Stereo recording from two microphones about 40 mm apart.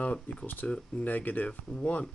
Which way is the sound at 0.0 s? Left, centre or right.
Left.